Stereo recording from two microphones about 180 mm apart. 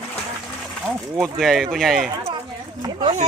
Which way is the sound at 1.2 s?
Centre (ahead or behind).